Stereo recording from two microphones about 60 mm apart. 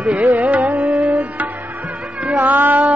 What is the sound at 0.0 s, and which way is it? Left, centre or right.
Tabla, right.